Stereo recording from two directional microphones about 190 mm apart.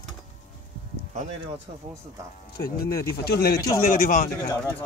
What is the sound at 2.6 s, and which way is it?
Speech, 50° left (ahead or behind).